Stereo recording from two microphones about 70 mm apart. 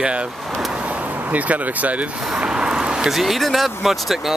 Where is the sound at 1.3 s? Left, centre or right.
Right; by 4.3 s centre.